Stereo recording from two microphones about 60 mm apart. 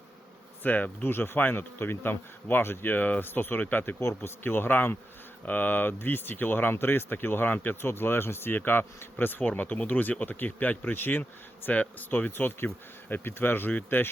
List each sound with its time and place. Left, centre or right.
0.6 s speech: left
4.0 s speech: left